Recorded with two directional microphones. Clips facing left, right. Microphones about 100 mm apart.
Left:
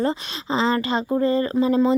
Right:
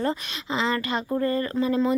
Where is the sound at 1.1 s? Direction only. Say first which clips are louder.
Left 5 dB; 20° left (ahead or behind).